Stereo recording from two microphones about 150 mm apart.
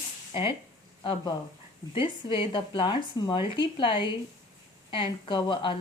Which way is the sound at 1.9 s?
35° left (ahead or behind).